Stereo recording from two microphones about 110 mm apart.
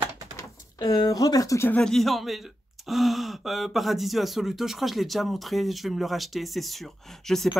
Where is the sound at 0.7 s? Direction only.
40° left (ahead or behind).